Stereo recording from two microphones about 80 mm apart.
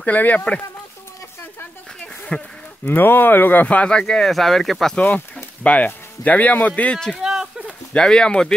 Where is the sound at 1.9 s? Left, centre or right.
Centre.